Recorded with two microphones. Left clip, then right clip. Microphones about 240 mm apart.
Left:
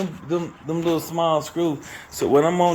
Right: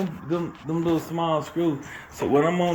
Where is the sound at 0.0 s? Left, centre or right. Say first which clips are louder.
Left 2 dB; centre.